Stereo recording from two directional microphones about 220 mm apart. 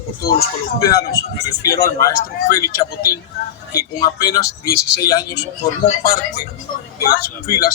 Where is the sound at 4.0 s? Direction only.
15° left (ahead or behind).